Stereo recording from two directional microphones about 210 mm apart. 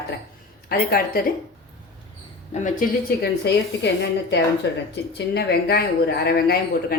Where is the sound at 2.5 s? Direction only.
35° left (ahead or behind).